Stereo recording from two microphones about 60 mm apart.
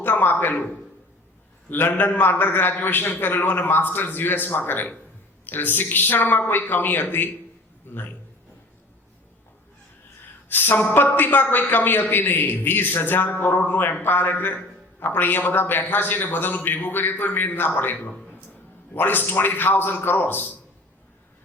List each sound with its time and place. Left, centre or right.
0.0 s a man's voice: left
1.7 s a man's voice: left
10.5 s a man's voice: left